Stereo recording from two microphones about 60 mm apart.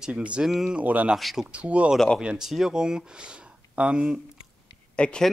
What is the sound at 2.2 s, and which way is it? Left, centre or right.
Speech, centre.